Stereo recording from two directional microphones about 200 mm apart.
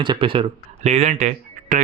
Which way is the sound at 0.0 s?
25° right (ahead or behind).